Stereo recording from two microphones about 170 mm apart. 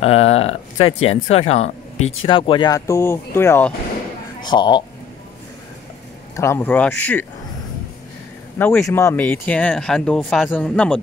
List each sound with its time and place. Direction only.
0.0 s speech: 35° left (ahead or behind); by 3.7 s 15° left (ahead or behind)
4.4 s speech: 25° left (ahead or behind)
6.3 s speech: 15° left (ahead or behind)
8.5 s speech: 5° left (ahead or behind)